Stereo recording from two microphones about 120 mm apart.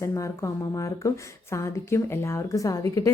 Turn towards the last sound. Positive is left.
turn(degrees=30)  # may be behind; listen again after turning